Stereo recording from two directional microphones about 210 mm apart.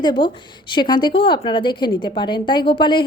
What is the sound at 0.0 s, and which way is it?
A woman's voice, 20° left (ahead or behind).